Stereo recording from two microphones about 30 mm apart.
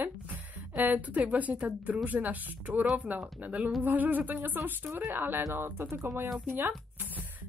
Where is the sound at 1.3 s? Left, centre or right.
Right.